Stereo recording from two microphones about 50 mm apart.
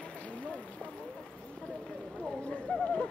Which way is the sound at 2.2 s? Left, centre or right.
Left.